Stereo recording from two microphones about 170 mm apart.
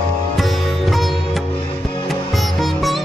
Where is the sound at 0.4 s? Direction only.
Centre (ahead or behind).